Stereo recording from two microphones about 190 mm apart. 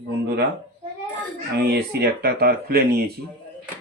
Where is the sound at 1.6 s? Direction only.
60° right (ahead or behind).